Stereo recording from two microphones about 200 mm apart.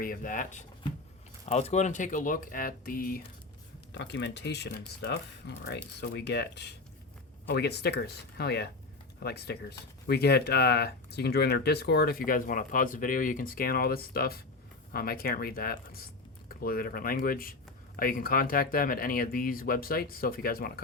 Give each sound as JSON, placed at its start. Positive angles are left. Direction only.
{"t": 0.0, "sound": "speech", "side_deg": 45}
{"t": 3.9, "sound": "speech", "side_deg": 60}